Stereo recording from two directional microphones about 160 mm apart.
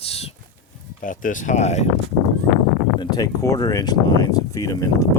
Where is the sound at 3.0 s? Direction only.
25° left (ahead or behind).